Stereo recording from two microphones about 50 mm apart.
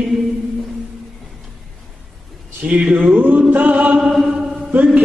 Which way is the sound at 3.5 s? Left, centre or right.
Right.